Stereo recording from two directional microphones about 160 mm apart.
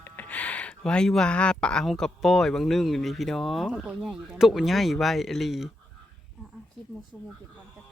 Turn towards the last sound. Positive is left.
turn(degrees=0)  # may be behind; listen again after turning